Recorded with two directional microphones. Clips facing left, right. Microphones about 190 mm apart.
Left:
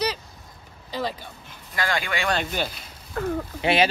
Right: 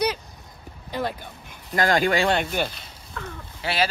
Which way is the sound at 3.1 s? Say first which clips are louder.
Left 11 dB; 45° left (ahead or behind).